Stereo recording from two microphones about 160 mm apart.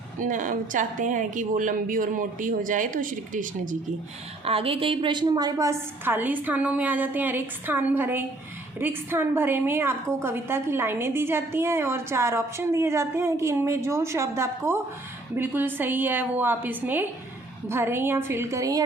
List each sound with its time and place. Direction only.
0.2 s a woman's voice: 55° right (ahead or behind)
4.4 s a woman's voice: 35° right (ahead or behind); by 18.8 s 20° right (ahead or behind)